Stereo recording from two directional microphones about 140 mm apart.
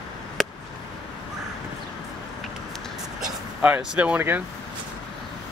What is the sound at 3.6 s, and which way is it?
Speech, 5° right (ahead or behind).